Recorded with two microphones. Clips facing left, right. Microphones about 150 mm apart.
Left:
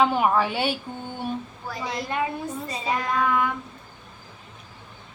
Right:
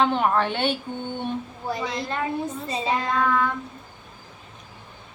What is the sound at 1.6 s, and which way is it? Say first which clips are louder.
A woman's voice: right 4 dB; 20° right (ahead or behind).